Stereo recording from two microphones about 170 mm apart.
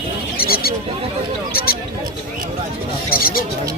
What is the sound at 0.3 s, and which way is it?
Wild animals, 60° left (ahead or behind).